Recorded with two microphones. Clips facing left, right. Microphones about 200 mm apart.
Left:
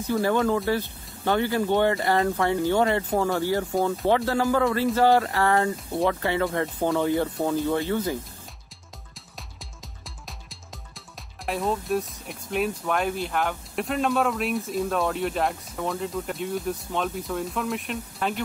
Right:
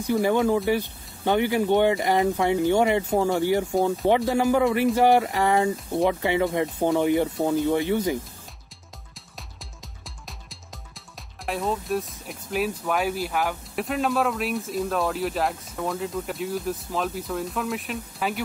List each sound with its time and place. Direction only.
0.0 s speech: 15° right (ahead or behind)
10.0 s music: centre (ahead or behind)
11.4 s speech: centre (ahead or behind)